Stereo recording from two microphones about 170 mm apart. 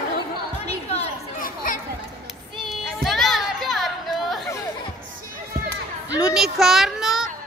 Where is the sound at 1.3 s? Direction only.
55° left (ahead or behind).